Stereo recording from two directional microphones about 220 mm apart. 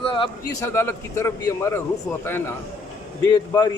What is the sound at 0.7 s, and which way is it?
A man's voice, 10° left (ahead or behind).